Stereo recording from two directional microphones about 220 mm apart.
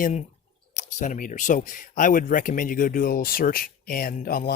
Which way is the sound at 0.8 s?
35° left (ahead or behind).